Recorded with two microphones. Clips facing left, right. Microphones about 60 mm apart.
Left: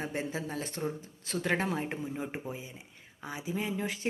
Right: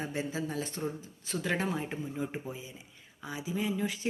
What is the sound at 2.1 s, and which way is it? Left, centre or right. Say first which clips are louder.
Speech: even; left.